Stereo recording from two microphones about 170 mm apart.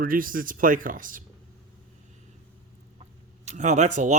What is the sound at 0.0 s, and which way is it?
A man's voice, 55° right (ahead or behind).